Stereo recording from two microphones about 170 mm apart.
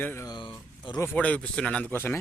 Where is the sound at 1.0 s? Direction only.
10° left (ahead or behind).